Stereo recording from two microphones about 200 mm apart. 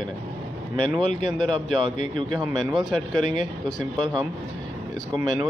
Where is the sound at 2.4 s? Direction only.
20° right (ahead or behind).